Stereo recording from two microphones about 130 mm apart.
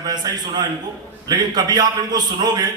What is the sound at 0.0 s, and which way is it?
A man's voice, 30° right (ahead or behind).